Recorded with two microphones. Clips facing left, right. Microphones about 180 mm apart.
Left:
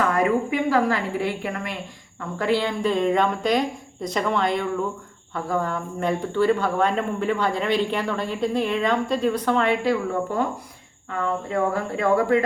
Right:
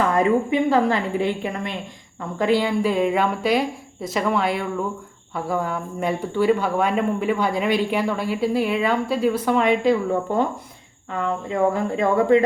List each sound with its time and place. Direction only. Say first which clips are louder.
0.1 s a woman's voice: right 3 dB; 25° right (ahead or behind)
11.4 s a woman's voice: right 6 dB; 20° right (ahead or behind)